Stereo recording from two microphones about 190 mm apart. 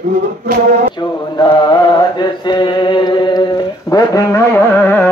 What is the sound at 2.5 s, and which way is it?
Music, 25° left (ahead or behind).